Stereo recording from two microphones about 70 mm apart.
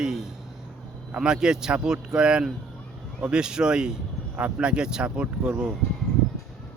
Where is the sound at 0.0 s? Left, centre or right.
Centre.